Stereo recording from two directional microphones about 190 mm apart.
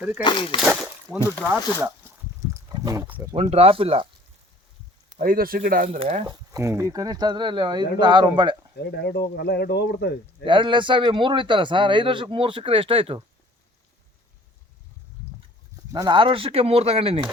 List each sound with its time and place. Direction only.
0.2 s speech: 25° left (ahead or behind)
0.6 s a sound: 5° right (ahead or behind)
2.5 s wild animals: 20° right (ahead or behind)
3.3 s speech: 30° right (ahead or behind)
5.1 s speech: 50° right (ahead or behind)
6.2 s speech: 15° right (ahead or behind)
8.8 s speech: 60° left (ahead or behind)
10.4 s speech: 25° right (ahead or behind)
15.9 s speech: 20° right (ahead or behind)